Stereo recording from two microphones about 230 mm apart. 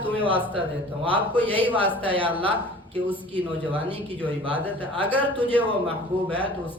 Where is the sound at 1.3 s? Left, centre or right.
Centre.